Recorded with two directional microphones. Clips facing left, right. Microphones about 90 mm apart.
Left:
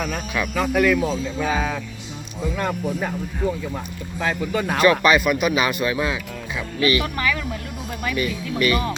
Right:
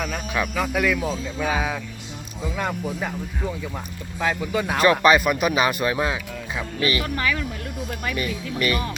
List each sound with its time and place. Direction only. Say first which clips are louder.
0.5 s speech: left 6 dB; centre (ahead or behind)
4.2 s speech: even; 5° right (ahead or behind)
4.8 s speech: even; 35° right (ahead or behind)
8.0 s speech: left 4 dB; 35° right (ahead or behind)